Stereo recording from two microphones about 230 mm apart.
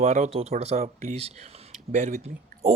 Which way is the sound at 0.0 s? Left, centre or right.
Right.